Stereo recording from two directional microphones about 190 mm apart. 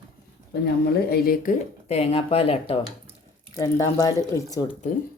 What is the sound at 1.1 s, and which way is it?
Speech, 50° left (ahead or behind).